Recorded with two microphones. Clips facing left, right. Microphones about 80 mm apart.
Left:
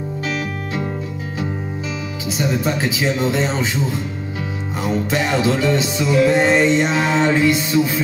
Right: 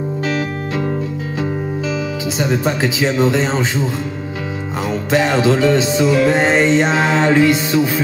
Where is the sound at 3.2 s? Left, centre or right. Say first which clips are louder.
Right 4 dB; right.